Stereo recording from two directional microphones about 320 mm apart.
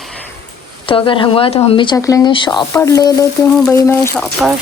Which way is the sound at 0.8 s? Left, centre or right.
Centre.